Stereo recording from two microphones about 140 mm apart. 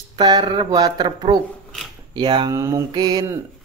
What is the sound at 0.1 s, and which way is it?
Speech, 30° right (ahead or behind).